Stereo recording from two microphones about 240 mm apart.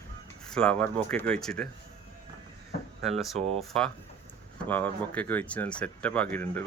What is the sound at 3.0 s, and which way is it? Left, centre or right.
Speech, centre.